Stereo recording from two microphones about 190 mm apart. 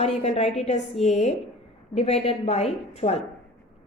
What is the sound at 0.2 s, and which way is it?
A woman's voice, 35° left (ahead or behind).